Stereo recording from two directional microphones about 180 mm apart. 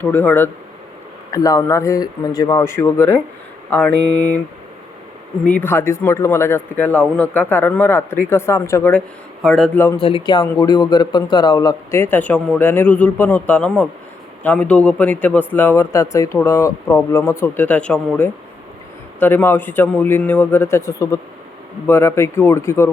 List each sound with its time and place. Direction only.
0.0 s a man's voice: 10° left (ahead or behind)
5.5 s a man's voice: 10° left (ahead or behind)
10.0 s a man's voice: 30° left (ahead or behind)